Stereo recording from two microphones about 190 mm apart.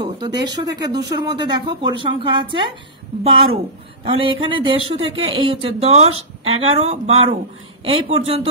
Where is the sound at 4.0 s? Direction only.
25° right (ahead or behind).